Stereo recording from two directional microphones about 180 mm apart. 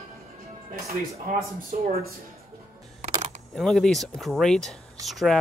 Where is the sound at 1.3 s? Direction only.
45° right (ahead or behind).